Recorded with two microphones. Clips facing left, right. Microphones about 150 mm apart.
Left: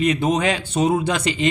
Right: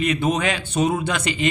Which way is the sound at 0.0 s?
35° left (ahead or behind).